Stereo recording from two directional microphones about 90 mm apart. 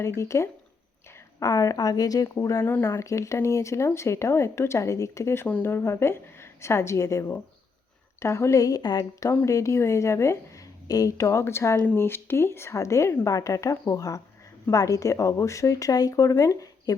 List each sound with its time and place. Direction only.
0.0 s a woman's voice: 30° left (ahead or behind)
5.5 s speech: 15° left (ahead or behind)
5.7 s speech: 30° left (ahead or behind); by 9.0 s 50° left (ahead or behind)
9.5 s speech: 35° left (ahead or behind)